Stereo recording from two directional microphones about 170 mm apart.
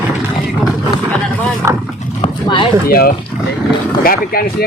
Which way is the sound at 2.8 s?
60° left (ahead or behind).